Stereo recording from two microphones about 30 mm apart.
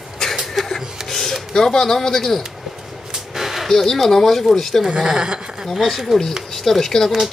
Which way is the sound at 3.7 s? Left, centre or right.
Centre.